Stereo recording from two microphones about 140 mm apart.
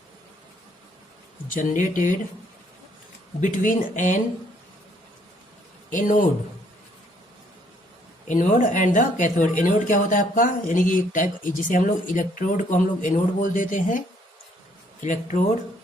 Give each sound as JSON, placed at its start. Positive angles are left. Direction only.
{"t": 1.5, "sound": "speech", "side_deg": 70}
{"t": 3.4, "sound": "speech", "side_deg": 70}
{"t": 5.9, "sound": "speech", "side_deg": 70}
{"t": 8.3, "sound": "speech", "side_deg": 65}
{"t": 15.0, "sound": "speech", "side_deg": 65}